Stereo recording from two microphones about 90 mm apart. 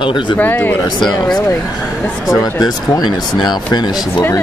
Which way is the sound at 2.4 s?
45° left (ahead or behind).